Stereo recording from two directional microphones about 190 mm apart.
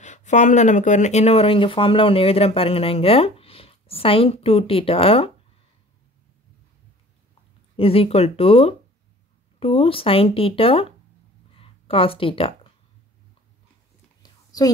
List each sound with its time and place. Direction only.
0.0 s speech: 40° left (ahead or behind)
7.7 s speech: 30° left (ahead or behind)
14.2 s a sound: 20° left (ahead or behind)